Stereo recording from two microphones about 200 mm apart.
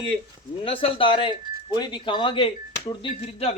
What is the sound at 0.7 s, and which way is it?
Speech, 30° left (ahead or behind).